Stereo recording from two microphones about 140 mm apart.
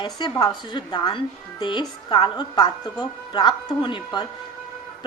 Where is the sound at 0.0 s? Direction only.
30° left (ahead or behind).